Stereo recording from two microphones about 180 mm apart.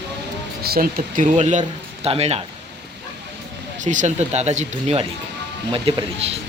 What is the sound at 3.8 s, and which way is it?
Speech, 45° right (ahead or behind).